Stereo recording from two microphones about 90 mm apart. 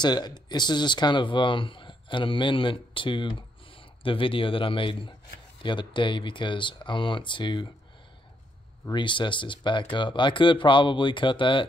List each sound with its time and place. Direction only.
0.0 s speech: 50° left (ahead or behind)
8.9 s speech: 60° left (ahead or behind)